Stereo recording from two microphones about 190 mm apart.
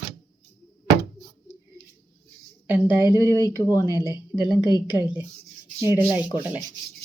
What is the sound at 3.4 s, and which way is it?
A woman's voice, 20° left (ahead or behind).